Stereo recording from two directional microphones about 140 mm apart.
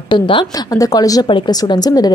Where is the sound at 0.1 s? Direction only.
35° left (ahead or behind).